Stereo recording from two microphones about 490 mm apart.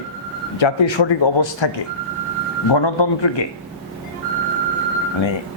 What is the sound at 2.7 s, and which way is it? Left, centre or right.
Speech, left.